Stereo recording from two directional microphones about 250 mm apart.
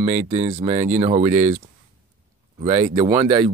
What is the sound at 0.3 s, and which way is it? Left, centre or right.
Speech, right.